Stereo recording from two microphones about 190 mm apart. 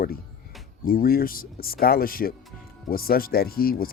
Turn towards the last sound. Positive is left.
turn(degrees=50)  # may be behind; listen again after turning